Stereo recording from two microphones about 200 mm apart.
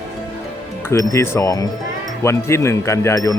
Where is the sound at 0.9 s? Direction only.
15° left (ahead or behind).